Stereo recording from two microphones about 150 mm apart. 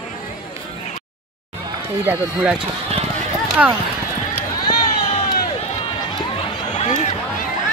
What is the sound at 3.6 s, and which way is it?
Speech, 5° right (ahead or behind).